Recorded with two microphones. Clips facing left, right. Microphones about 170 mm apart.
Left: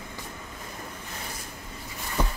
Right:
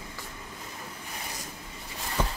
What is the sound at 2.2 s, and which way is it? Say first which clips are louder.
Music: left 1 dB; 10° left (ahead or behind).